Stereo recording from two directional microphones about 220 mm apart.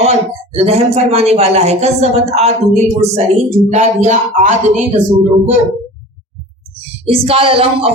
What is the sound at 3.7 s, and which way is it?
Speech, 35° right (ahead or behind).